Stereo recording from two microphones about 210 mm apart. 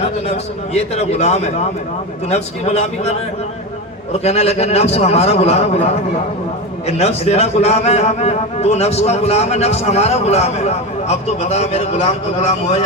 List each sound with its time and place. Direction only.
0.7 s a man's voice: 30° left (ahead or behind)